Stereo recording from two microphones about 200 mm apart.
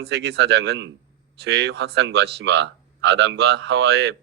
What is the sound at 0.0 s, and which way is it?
Speech, 60° right (ahead or behind).